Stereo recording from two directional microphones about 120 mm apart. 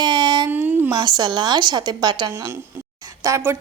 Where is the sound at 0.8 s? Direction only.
35° right (ahead or behind).